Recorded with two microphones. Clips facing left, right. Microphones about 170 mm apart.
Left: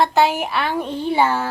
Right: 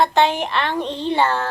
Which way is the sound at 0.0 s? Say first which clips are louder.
Even; 5° left (ahead or behind).